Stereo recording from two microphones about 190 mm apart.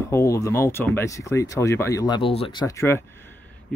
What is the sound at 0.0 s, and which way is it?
Speech, 15° left (ahead or behind).